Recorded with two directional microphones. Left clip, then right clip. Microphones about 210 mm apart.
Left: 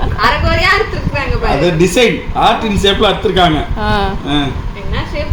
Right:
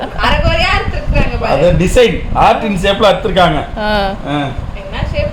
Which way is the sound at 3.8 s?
10° right (ahead or behind).